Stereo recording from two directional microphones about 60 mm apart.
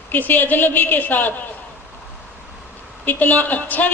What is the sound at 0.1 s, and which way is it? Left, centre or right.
A woman's voice, left.